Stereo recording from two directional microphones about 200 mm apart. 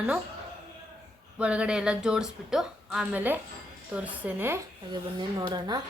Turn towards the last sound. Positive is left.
turn(degrees=-20)  # may be behind; listen again after turning